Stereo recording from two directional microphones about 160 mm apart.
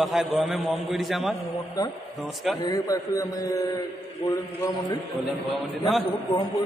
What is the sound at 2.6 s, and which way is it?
A man's voice, 25° left (ahead or behind).